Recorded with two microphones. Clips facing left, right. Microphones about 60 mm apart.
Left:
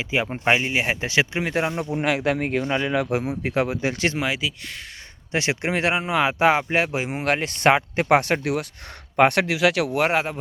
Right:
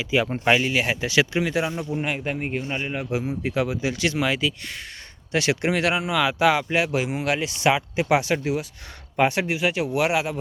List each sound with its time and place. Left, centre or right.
0.0 s speech: left
2.0 s speech: left
3.4 s speech: left
4.2 s speech: centre
5.3 s speech: left
9.1 s speech: left
9.9 s speech: left